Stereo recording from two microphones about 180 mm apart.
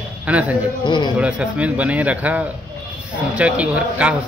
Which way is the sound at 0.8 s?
25° left (ahead or behind).